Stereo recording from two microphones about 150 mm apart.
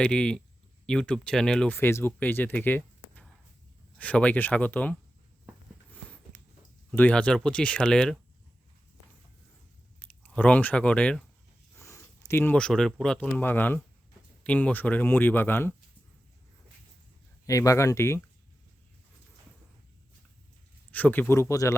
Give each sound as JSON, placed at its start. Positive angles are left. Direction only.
{"t": 0.0, "sound": "speech", "side_deg": 5}
{"t": 5.9, "sound": "a sound", "side_deg": 10}
{"t": 6.9, "sound": "speech", "side_deg": 10}
{"t": 10.0, "sound": "speech", "side_deg": 10}
{"t": 11.8, "sound": "a sound", "side_deg": 20}
{"t": 12.3, "sound": "speech", "side_deg": 15}
{"t": 17.4, "sound": "speech", "side_deg": 20}
{"t": 20.9, "sound": "speech", "side_deg": 10}